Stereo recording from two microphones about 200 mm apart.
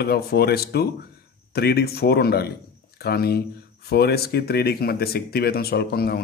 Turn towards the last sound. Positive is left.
turn(degrees=50)  # may be behind; listen again after turning